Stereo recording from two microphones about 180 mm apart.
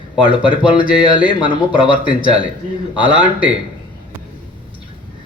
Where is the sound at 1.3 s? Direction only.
25° left (ahead or behind).